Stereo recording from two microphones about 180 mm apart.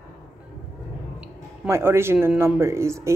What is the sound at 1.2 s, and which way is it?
Speech, 15° right (ahead or behind).